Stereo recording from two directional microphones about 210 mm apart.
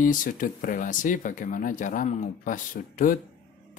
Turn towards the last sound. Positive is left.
turn(degrees=40)  # may be behind; listen again after turning